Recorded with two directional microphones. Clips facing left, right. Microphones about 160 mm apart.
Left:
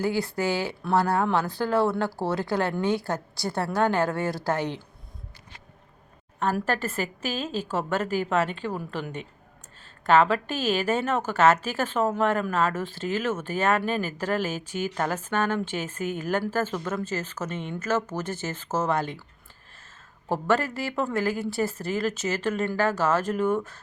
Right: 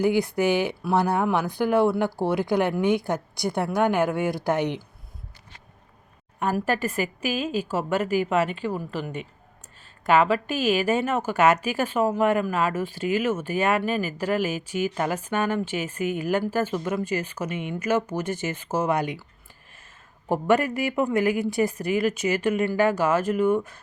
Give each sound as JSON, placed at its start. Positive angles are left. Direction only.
{"t": 0.0, "sound": "a woman's voice", "side_deg": -15}
{"t": 6.4, "sound": "a woman's voice", "side_deg": -10}
{"t": 20.2, "sound": "a woman's voice", "side_deg": -15}